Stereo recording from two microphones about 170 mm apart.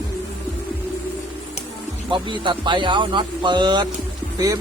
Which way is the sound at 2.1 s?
30° right (ahead or behind).